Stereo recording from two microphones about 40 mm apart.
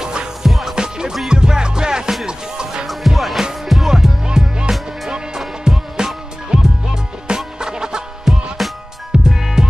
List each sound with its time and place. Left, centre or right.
0.0 s music: right
0.4 s music: centre
0.7 s music: centre
2.9 s music: centre